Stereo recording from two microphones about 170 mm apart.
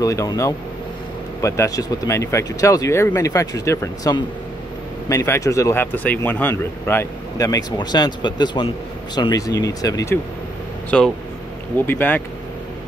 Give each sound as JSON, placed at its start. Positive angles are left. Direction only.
{"t": 0.0, "sound": "speech", "side_deg": 20}
{"t": 10.9, "sound": "speech", "side_deg": 5}